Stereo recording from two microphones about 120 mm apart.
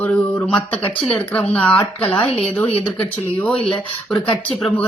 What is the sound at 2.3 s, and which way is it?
Speech, 55° left (ahead or behind).